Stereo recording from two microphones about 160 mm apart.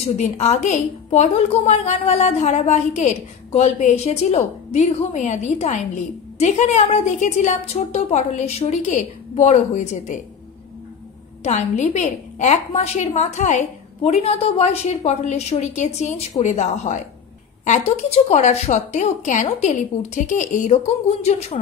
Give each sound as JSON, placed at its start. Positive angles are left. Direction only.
{"t": 0.0, "sound": "a woman's voice", "side_deg": 45}
{"t": 11.4, "sound": "a woman's voice", "side_deg": 45}